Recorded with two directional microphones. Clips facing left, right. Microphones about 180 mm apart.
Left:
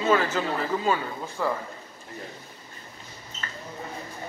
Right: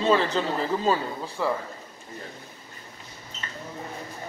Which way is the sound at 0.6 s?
35° right (ahead or behind).